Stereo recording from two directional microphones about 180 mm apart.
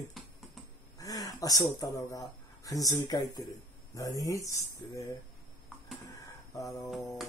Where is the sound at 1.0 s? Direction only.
20° left (ahead or behind).